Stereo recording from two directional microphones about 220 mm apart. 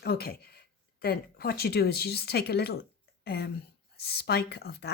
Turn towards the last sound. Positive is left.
turn(degrees=45)  # may be behind; listen again after turning